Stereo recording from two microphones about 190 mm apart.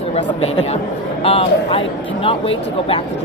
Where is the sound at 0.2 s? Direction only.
30° left (ahead or behind).